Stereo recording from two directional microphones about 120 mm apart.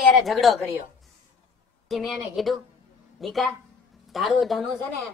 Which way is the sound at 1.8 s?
Centre (ahead or behind).